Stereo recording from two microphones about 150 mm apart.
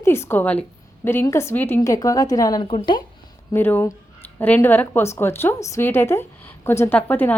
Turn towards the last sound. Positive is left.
turn(degrees=15)  # may be behind; listen again after turning